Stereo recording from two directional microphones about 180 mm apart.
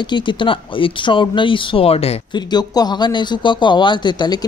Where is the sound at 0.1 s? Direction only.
25° left (ahead or behind).